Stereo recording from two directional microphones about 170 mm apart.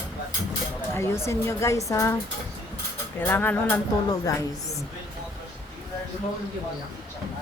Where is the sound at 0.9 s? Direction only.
15° left (ahead or behind).